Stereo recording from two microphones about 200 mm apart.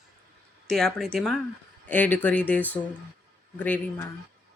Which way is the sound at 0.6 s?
Centre (ahead or behind).